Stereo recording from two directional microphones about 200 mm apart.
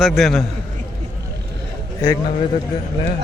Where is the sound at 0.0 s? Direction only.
Centre (ahead or behind).